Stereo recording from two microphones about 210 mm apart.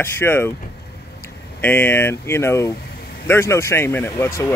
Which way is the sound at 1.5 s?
10° left (ahead or behind).